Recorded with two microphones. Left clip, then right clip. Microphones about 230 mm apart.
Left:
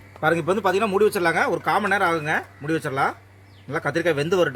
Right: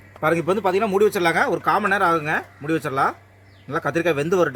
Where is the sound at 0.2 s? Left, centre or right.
Centre.